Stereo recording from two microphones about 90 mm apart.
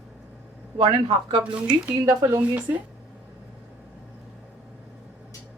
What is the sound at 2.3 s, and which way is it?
Speech, 20° right (ahead or behind).